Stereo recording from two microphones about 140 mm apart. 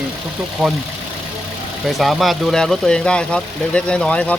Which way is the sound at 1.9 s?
Centre (ahead or behind).